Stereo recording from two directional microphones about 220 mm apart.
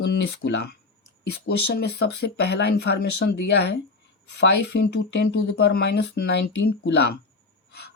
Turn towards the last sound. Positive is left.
turn(degrees=50)  # may be behind; listen again after turning